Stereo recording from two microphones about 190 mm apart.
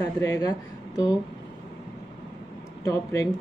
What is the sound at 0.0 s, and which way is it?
A woman's voice, 15° left (ahead or behind).